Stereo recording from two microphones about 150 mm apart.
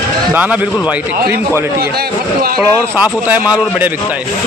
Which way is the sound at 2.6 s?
10° right (ahead or behind).